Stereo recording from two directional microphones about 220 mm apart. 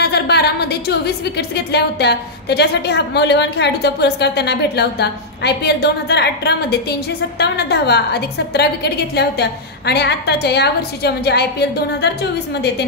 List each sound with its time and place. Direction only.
0.0 s a woman's voice: 50° left (ahead or behind)